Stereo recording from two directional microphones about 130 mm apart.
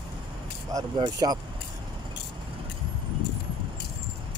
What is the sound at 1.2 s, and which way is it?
Speech, 35° right (ahead or behind).